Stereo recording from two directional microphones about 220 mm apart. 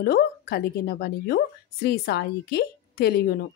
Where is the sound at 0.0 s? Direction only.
45° left (ahead or behind).